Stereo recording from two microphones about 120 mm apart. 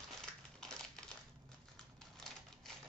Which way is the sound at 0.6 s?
5° left (ahead or behind).